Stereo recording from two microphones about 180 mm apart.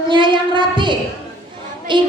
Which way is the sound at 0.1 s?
25° right (ahead or behind).